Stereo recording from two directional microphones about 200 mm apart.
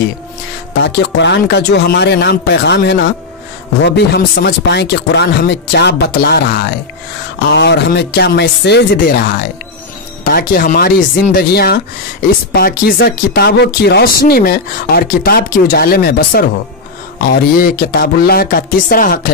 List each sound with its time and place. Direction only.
0.8 s speech: 60° left (ahead or behind)